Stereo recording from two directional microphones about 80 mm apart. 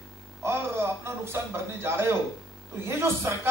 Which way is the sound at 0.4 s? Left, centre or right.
Right.